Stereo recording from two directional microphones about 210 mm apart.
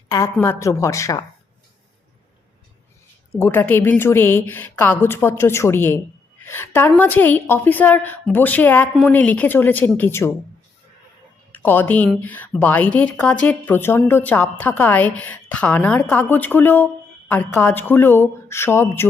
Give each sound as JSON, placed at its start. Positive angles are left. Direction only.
{"t": 0.1, "sound": "a woman's voice", "side_deg": 15}
{"t": 3.3, "sound": "a woman's voice", "side_deg": 10}
{"t": 11.5, "sound": "a woman's voice", "side_deg": 10}